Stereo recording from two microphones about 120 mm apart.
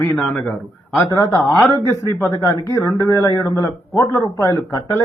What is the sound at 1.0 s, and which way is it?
Speech, 30° left (ahead or behind).